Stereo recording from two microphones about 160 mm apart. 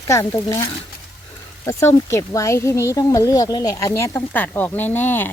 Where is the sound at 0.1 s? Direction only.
20° left (ahead or behind).